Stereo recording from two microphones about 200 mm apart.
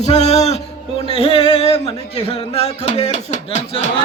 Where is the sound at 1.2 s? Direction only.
30° left (ahead or behind).